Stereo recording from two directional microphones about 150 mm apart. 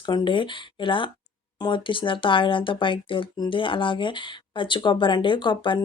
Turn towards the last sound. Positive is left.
turn(degrees=30)  # may be behind; listen again after turning